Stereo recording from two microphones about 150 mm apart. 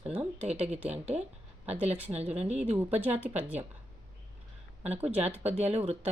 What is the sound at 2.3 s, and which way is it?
Speech, 45° right (ahead or behind).